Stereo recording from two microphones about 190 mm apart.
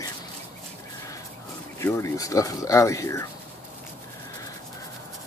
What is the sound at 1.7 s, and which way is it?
Speech, 15° left (ahead or behind).